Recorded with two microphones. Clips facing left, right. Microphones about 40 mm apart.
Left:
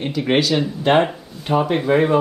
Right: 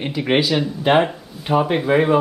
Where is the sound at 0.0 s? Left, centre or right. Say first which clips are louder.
Even; centre.